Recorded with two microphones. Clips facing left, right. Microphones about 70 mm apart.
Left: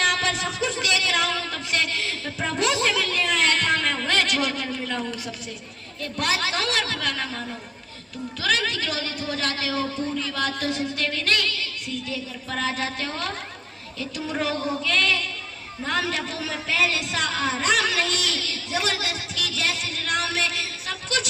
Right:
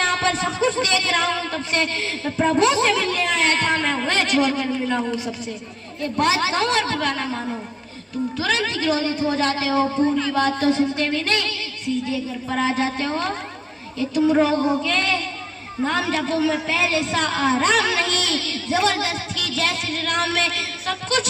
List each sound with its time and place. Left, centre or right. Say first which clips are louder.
0.0 s a man's voice: right 3 dB; right